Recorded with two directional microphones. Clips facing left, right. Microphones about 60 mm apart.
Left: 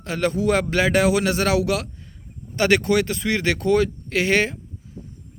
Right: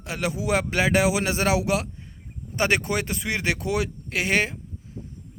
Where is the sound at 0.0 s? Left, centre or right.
Centre.